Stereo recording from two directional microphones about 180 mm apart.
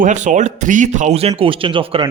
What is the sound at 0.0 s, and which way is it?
A man's voice, 45° right (ahead or behind).